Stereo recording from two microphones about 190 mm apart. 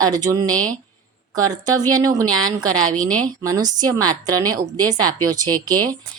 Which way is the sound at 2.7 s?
90° right.